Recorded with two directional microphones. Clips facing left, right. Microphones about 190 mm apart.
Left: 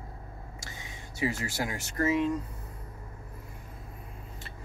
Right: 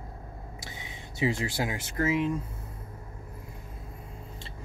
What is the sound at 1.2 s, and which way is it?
Speech, 25° right (ahead or behind).